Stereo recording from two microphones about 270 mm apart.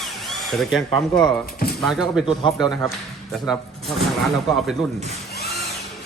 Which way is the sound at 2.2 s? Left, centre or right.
Centre.